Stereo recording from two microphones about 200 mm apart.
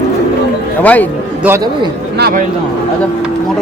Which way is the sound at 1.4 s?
10° right (ahead or behind).